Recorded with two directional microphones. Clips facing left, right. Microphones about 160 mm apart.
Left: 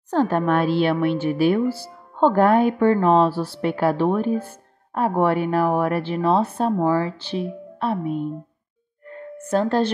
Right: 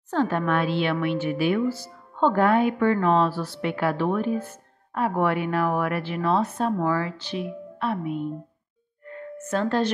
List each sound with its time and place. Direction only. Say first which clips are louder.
0.1 s speech: left 4 dB; 40° left (ahead or behind)
9.4 s speech: left 4 dB; 35° left (ahead or behind)